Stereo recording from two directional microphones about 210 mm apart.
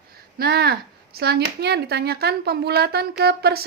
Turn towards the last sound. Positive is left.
turn(degrees=-50)  # may be behind; listen again after turning